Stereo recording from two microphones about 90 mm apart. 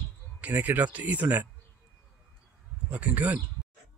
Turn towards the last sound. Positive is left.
turn(degrees=-15)  # may be behind; listen again after turning